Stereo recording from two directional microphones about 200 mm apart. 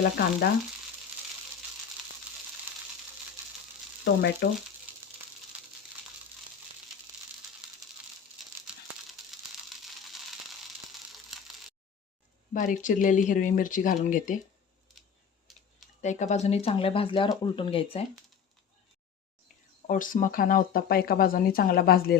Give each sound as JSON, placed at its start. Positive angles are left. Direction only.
{"t": 0.0, "sound": "speech", "side_deg": 50}
{"t": 4.0, "sound": "speech", "side_deg": 55}
{"t": 4.9, "sound": "a sound", "side_deg": -10}
{"t": 8.4, "sound": "crumpling", "side_deg": 0}
{"t": 12.5, "sound": "speech", "side_deg": 40}
{"t": 15.5, "sound": "computer keyboard", "side_deg": 0}
{"t": 16.0, "sound": "speech", "side_deg": 35}
{"t": 19.9, "sound": "speech", "side_deg": 40}